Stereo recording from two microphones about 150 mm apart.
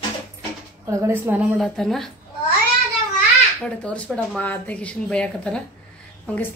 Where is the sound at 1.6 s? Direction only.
Centre (ahead or behind).